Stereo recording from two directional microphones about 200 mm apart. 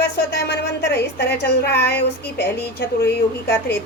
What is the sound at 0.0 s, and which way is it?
A woman's voice, 55° left (ahead or behind).